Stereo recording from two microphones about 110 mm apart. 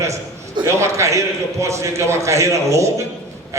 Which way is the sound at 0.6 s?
25° right (ahead or behind).